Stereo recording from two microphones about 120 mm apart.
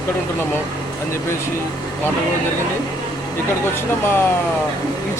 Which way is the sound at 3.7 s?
20° left (ahead or behind).